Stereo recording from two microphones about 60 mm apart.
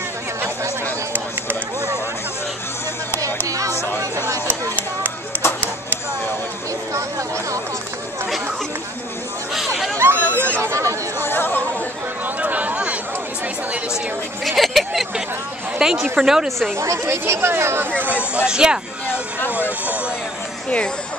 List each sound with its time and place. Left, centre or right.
3.4 s chatter: right
4.7 s chop: right
6.9 s a sound: right
9.9 s chatter: right
10.2 s chatter: left
10.6 s chatter: right
11.2 s chatter: left
12.4 s a sound: right
14.4 s a sound: centre
15.8 s a woman's voice: centre
16.7 s speech: right
18.3 s a woman's voice: centre